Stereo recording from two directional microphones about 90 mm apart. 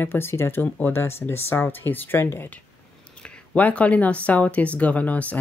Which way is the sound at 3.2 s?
10° left (ahead or behind).